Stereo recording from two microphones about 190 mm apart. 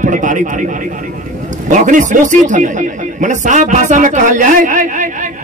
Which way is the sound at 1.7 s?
40° right (ahead or behind).